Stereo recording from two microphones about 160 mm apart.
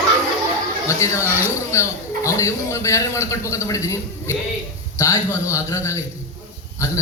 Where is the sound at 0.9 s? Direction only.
20° left (ahead or behind).